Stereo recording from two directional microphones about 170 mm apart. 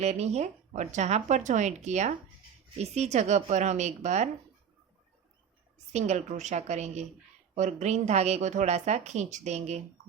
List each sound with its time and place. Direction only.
0.0 s speech: 40° right (ahead or behind)
5.9 s speech: 40° right (ahead or behind)